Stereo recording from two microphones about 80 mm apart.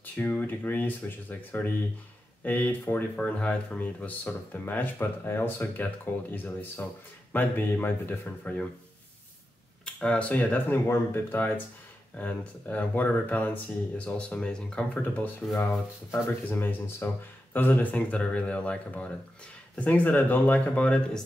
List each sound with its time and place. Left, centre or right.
0.0 s speech: left
9.8 s speech: centre
15.0 s speech: left